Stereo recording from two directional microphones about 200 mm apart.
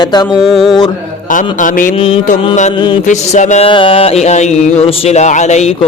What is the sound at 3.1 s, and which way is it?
A man's voice, 35° left (ahead or behind).